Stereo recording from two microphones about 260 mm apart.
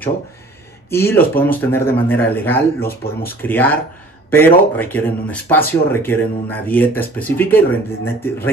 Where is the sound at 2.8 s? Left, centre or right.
Left.